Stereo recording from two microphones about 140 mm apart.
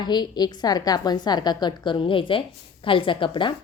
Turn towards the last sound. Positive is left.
turn(degrees=35)  # may be behind; listen again after turning